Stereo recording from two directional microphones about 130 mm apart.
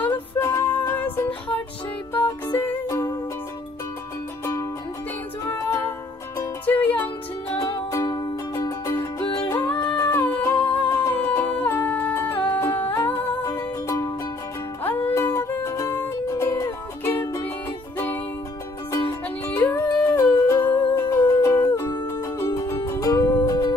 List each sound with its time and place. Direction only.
0.0 s music: 15° left (ahead or behind)
5.5 s music: 20° left (ahead or behind)
7.9 s music: 25° left (ahead or behind)
9.7 s music: 35° left (ahead or behind)
10.1 s music: 15° left (ahead or behind)
12.4 s humming: 15° left (ahead or behind)
13.0 s music: 15° left (ahead or behind)
20.1 s music: 25° left (ahead or behind)